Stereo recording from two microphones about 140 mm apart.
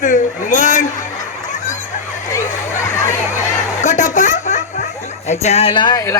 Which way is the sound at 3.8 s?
60° left (ahead or behind).